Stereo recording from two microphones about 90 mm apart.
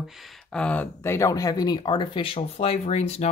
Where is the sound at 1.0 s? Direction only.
30° left (ahead or behind).